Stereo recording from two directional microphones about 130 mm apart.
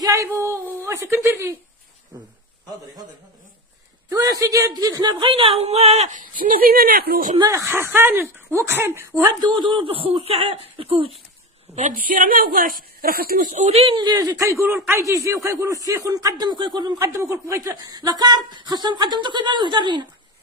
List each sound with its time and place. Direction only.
0.0 s a sound: 25° right (ahead or behind)
4.1 s speech: 25° right (ahead or behind)
5.3 s speech: 45° right (ahead or behind); by 7.3 s 90° right
7.3 s speech: 25° right (ahead or behind)
9.4 s speech: 40° right (ahead or behind)
11.7 s a woman's voice: 75° right (ahead or behind); by 13.7 s 90° right
13.7 s speech: 50° right (ahead or behind)
14.0 s speech: 30° right (ahead or behind)
17.0 s speech: 25° right (ahead or behind)